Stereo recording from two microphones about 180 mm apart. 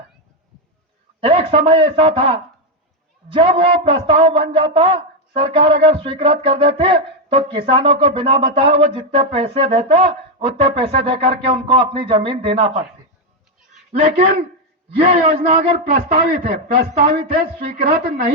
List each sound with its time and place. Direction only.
1.2 s speech: 30° right (ahead or behind)
14.0 s a man's voice: 50° right (ahead or behind)
16.0 s a man's voice: 50° right (ahead or behind)